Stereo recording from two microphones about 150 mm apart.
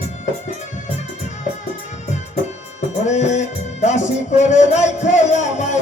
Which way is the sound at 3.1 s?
50° left (ahead or behind).